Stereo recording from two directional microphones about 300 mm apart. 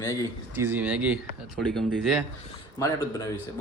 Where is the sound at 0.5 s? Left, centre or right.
Centre.